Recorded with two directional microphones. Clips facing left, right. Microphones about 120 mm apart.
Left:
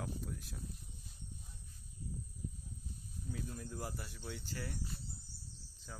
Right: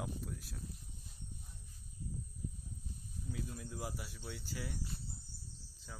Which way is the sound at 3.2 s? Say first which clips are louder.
Even; centre (ahead or behind).